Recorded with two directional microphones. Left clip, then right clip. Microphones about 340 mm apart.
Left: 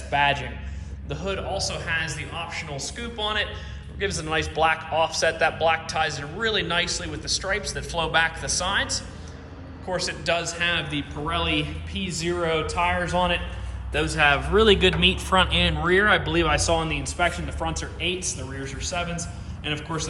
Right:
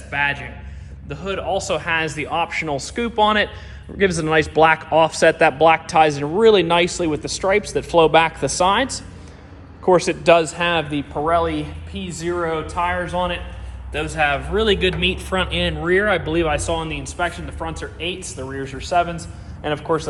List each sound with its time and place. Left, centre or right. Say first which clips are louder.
0.1 s a man's voice: right 1 dB; centre